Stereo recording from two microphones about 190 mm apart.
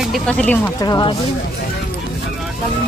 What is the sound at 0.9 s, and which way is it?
Speech, 25° left (ahead or behind).